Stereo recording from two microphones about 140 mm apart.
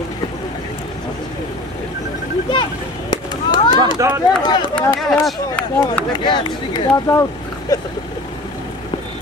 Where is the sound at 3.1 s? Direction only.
30° left (ahead or behind).